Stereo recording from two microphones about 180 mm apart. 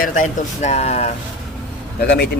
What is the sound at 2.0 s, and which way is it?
Speech, 65° left (ahead or behind).